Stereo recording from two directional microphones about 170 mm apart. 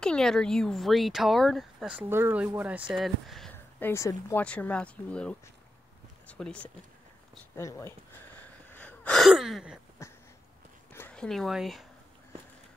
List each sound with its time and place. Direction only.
0.0 s speech: 5° left (ahead or behind)
3.5 s speech: 15° left (ahead or behind)
7.5 s speech: 15° left (ahead or behind)
8.7 s gasp: 10° left (ahead or behind)
10.0 s a sound: 15° left (ahead or behind); by 11.8 s centre (ahead or behind)